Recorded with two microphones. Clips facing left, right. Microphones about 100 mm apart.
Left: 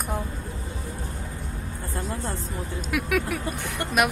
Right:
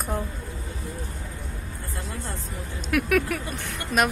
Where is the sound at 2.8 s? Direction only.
20° left (ahead or behind).